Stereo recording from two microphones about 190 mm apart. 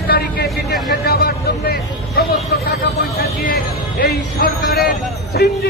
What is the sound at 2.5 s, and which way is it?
A man's voice, 55° left (ahead or behind).